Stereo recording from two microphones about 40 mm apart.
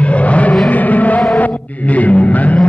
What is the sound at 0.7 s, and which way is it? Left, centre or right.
Music, left.